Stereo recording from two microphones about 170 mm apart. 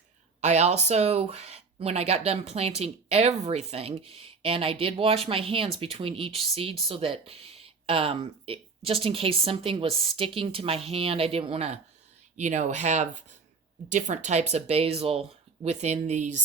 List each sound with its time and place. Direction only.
0.4 s speech: 40° right (ahead or behind)